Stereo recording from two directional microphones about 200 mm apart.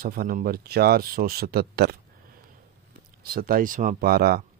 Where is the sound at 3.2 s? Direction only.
50° right (ahead or behind).